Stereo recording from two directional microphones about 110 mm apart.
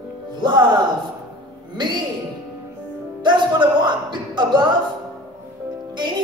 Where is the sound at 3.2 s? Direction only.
45° right (ahead or behind).